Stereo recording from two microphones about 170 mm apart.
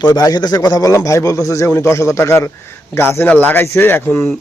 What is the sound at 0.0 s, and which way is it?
A man's voice, 25° left (ahead or behind).